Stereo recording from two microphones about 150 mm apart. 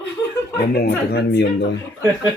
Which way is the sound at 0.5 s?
90° left.